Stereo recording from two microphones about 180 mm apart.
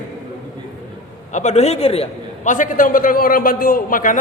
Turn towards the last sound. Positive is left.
turn(degrees=50)  # may be behind; listen again after turning